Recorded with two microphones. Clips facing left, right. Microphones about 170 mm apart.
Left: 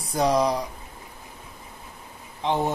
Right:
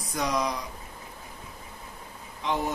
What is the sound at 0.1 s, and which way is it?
Speech, 30° left (ahead or behind).